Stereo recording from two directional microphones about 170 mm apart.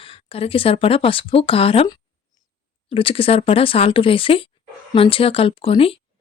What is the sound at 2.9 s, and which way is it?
Speech, 35° left (ahead or behind).